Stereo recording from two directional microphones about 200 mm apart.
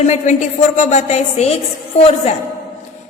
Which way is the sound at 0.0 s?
35° left (ahead or behind).